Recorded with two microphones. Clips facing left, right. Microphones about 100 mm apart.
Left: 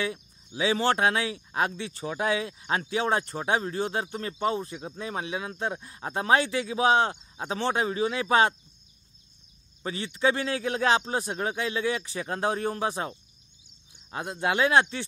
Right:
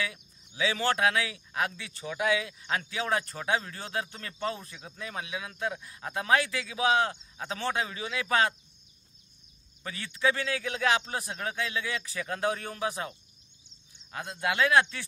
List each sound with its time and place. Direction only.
0.0 s speech: 30° left (ahead or behind)
9.8 s a man's voice: 25° left (ahead or behind)
14.1 s speech: 25° left (ahead or behind)